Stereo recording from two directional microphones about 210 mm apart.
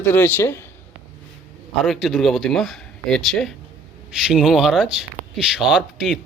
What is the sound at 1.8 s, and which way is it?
Speech, centre (ahead or behind).